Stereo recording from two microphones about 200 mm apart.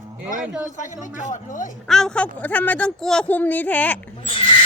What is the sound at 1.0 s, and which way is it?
Speech, 40° left (ahead or behind).